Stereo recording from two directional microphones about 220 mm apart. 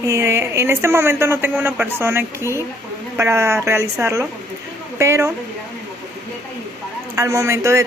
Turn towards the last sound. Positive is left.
turn(degrees=-15)  # may be behind; listen again after turning